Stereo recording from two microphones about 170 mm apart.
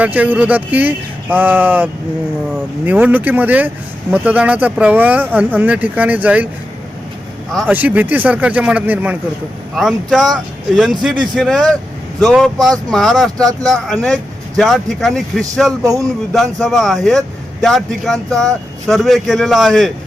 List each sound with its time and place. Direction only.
0.0 s speech: 10° right (ahead or behind)
7.7 s speech: 10° right (ahead or behind)
15.8 s speech: 20° right (ahead or behind)
16.3 s speech: centre (ahead or behind)